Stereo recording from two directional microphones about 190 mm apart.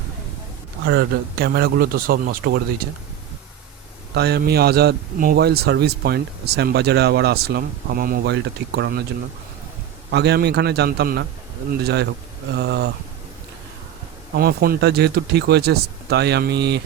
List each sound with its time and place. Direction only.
0.9 s a man's voice: 60° right (ahead or behind)
4.1 s a man's voice: 60° right (ahead or behind)
10.1 s a man's voice: 60° right (ahead or behind)
14.3 s a man's voice: 55° right (ahead or behind)